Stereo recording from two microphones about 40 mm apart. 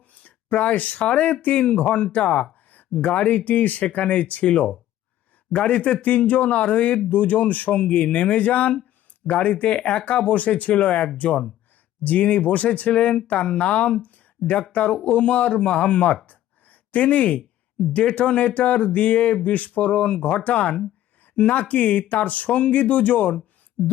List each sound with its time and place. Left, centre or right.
0.2 s speech: left
6.0 s speech: left
16.2 s chopping: left
17.9 s speech: left